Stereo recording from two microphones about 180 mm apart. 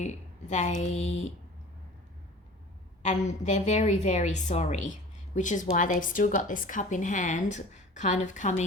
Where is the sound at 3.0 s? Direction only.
40° left (ahead or behind).